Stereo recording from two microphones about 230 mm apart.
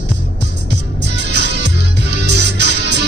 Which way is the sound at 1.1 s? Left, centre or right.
Right.